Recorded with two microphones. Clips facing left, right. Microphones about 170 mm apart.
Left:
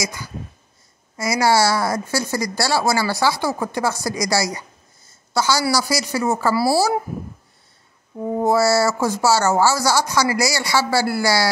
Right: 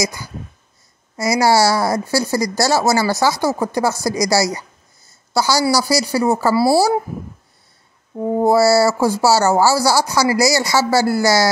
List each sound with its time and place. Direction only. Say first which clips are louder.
0.0 s a woman's voice: right 5 dB; 35° right (ahead or behind)
8.3 s a woman's voice: right 4 dB; 35° right (ahead or behind)